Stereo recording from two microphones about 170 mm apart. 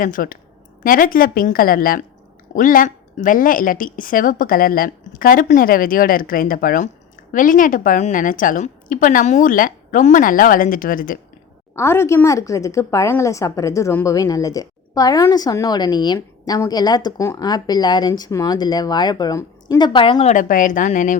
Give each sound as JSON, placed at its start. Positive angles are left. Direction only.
{"t": 0.0, "sound": "a woman's voice", "side_deg": 55}
{"t": 11.7, "sound": "a woman's voice", "side_deg": 15}
{"t": 20.3, "sound": "a woman's voice", "side_deg": 50}